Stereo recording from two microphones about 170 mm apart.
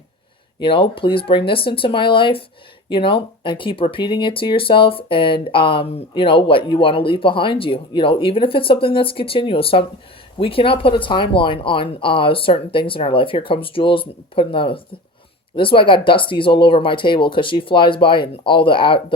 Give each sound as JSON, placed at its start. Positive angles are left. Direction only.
{"t": 0.6, "sound": "speech", "side_deg": 30}